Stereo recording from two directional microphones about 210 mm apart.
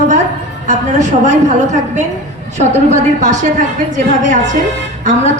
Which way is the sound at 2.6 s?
35° right (ahead or behind).